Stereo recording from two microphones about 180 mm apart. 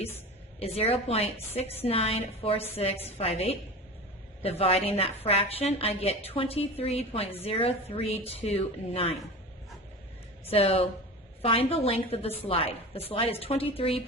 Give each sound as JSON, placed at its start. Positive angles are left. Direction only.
{"t": 0.6, "sound": "a woman's voice", "side_deg": 35}
{"t": 10.5, "sound": "a woman's voice", "side_deg": 35}